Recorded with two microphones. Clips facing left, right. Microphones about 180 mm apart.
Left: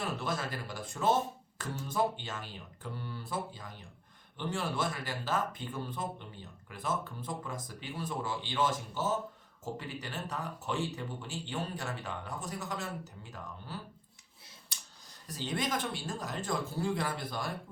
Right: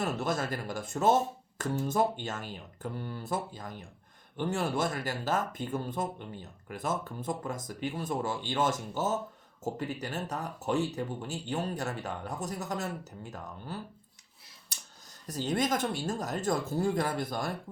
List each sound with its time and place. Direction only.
0.0 s speech: 45° right (ahead or behind)
15.3 s speech: 45° right (ahead or behind)